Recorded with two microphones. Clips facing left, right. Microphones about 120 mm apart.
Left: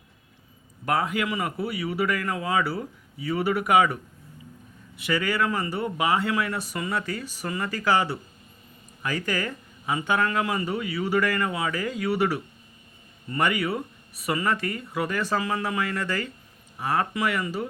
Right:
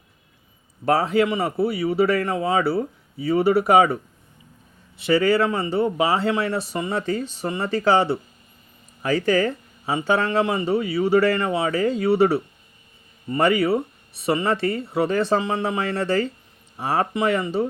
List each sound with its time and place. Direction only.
0.9 s speech: 35° right (ahead or behind)